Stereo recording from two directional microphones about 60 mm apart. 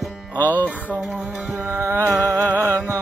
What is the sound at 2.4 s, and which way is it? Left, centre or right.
Music, right.